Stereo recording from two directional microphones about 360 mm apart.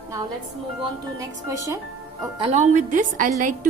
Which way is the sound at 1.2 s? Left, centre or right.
Centre.